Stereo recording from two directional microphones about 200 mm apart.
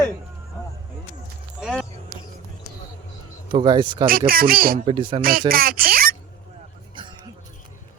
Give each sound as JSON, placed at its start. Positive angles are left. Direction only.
{"t": 1.6, "sound": "a sound", "side_deg": -5}
{"t": 3.5, "sound": "speech", "side_deg": -20}
{"t": 4.3, "sound": "speech", "side_deg": -45}
{"t": 4.9, "sound": "speech", "side_deg": -25}
{"t": 5.2, "sound": "speech", "side_deg": -45}
{"t": 6.9, "sound": "music", "side_deg": -25}